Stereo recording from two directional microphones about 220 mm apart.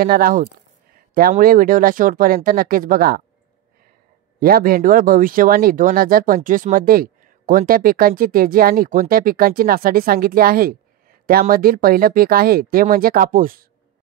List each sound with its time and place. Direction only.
0.0 s speech: 40° right (ahead or behind)
4.4 s speech: 40° right (ahead or behind)